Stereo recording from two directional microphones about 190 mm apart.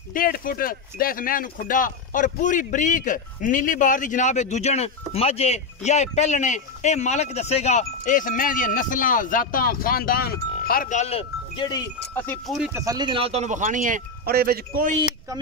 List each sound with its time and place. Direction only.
0.1 s speech: 50° left (ahead or behind); by 11.8 s 25° left (ahead or behind)
12.1 s speech: 5° left (ahead or behind)
12.7 s speech: 20° right (ahead or behind); by 15.0 s 50° right (ahead or behind)